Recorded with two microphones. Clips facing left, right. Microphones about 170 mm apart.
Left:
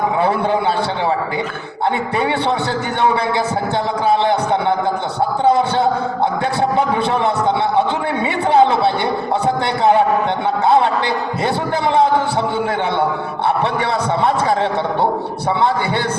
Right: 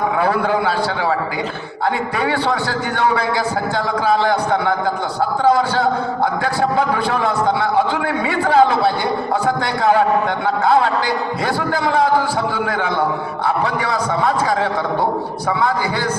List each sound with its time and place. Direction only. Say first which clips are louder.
0.2 s a sound: even; 25° left (ahead or behind)
2.1 s a man's voice: left 2 dB; 25° left (ahead or behind)
4.0 s a man's voice: left 1 dB; 25° left (ahead or behind)
11.4 s a man's voice: left 2 dB; 25° left (ahead or behind)